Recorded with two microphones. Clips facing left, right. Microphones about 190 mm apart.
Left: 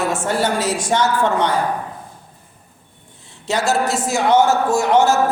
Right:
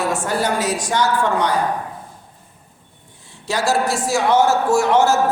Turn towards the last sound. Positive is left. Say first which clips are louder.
# even
turn(degrees=15)  # may be behind; listen again after turning